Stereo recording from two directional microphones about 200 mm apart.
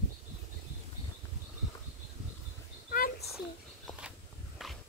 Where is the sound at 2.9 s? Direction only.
45° left (ahead or behind).